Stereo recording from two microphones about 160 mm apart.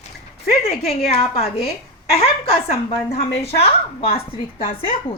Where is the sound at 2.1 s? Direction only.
40° left (ahead or behind).